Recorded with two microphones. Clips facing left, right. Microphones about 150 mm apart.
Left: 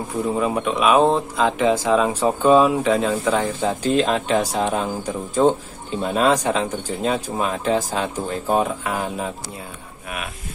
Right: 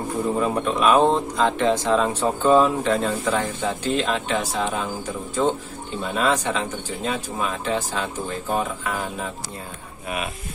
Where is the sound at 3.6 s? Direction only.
40° left (ahead or behind).